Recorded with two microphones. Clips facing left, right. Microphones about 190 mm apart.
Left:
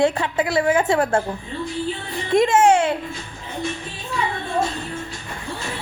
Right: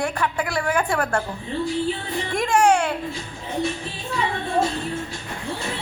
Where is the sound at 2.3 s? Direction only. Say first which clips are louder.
Left 4 dB; 20° left (ahead or behind).